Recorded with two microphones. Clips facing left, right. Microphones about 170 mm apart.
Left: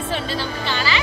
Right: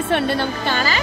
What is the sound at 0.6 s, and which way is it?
Music, 45° right (ahead or behind).